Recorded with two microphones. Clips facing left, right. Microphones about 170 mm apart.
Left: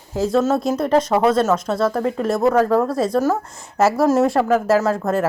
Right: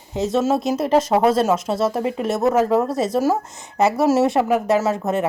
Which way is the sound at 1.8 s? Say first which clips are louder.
Left 1 dB; 25° right (ahead or behind).